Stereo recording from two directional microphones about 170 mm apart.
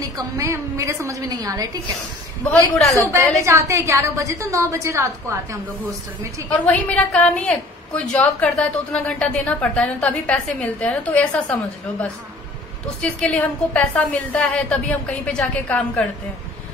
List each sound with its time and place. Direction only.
0.0 s a woman's voice: 20° right (ahead or behind)
2.7 s a woman's voice: centre (ahead or behind)
3.0 s a woman's voice: 15° right (ahead or behind)
6.5 s a woman's voice: 10° left (ahead or behind)
13.0 s a woman's voice: 5° left (ahead or behind)